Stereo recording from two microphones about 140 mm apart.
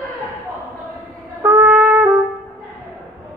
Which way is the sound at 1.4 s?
10° right (ahead or behind).